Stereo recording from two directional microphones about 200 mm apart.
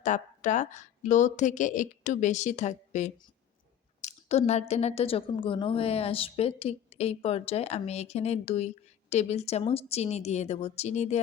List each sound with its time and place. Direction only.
0.0 s a woman's voice: 40° left (ahead or behind)